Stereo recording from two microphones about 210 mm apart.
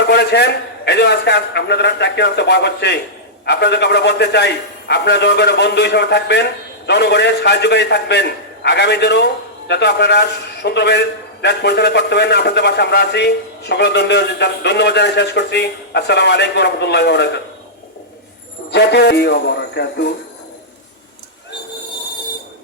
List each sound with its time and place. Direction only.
0.1 s a man's voice: 50° left (ahead or behind)
18.7 s a man's voice: 50° left (ahead or behind)